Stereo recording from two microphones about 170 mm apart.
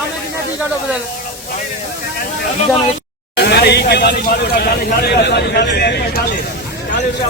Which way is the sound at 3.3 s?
75° left (ahead or behind).